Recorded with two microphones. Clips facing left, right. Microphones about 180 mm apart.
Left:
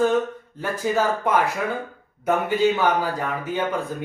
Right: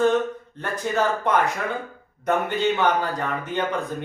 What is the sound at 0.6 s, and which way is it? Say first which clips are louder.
Speech: left 1 dB; 5° left (ahead or behind).